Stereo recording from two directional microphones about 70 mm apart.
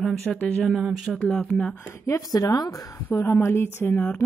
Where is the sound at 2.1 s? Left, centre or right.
Left.